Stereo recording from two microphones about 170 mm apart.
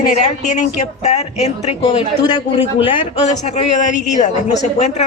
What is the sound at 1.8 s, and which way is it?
A man's voice, 25° left (ahead or behind).